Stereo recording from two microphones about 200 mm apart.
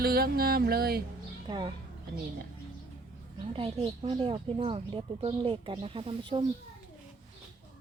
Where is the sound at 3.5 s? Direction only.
30° right (ahead or behind).